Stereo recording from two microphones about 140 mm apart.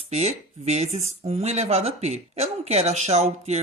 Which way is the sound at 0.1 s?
50° right (ahead or behind).